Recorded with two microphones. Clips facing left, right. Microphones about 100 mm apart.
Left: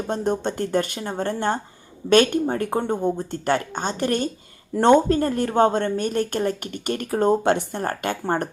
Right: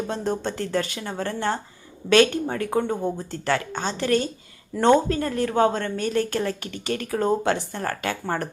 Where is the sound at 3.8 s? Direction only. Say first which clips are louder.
Right 1 dB; 50° left (ahead or behind); by 6.6 s 20° left (ahead or behind).